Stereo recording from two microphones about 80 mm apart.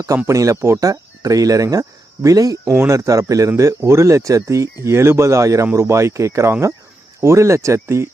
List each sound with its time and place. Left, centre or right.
0.3 s speech: right
2.7 s speech: right